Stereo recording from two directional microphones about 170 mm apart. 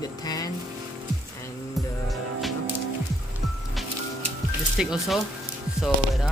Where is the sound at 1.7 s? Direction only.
Centre (ahead or behind).